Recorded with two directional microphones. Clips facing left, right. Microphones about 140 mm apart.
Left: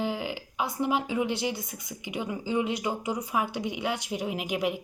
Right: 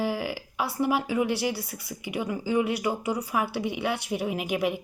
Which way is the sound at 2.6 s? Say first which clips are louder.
Right 2 dB; 65° right (ahead or behind).